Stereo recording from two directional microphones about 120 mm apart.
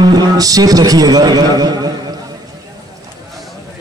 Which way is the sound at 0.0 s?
35° right (ahead or behind).